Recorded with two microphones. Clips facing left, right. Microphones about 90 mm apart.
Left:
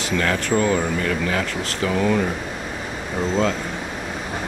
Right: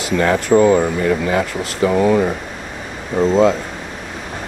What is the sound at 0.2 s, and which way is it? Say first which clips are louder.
Speech: right 9 dB; 20° right (ahead or behind).